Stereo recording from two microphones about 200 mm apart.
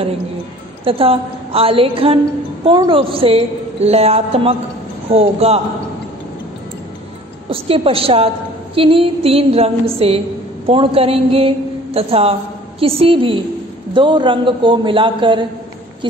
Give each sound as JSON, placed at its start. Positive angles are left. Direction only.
{"t": 0.8, "sound": "a woman's voice", "side_deg": -30}
{"t": 7.4, "sound": "a woman's voice", "side_deg": -30}